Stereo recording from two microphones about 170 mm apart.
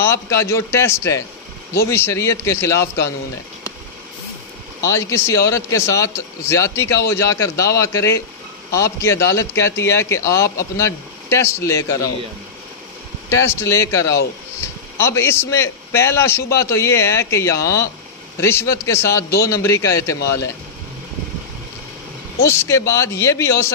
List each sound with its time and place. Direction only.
0.0 s a man's voice: 15° left (ahead or behind)
4.8 s a man's voice: 15° left (ahead or behind)
13.3 s a man's voice: 15° left (ahead or behind)
22.5 s a man's voice: 15° left (ahead or behind)